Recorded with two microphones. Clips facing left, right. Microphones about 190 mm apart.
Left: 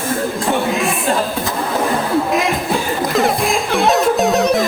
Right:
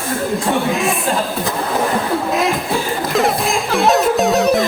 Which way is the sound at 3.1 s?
Centre (ahead or behind).